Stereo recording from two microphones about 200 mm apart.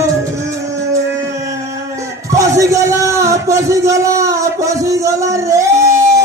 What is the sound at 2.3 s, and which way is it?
Music, 15° right (ahead or behind).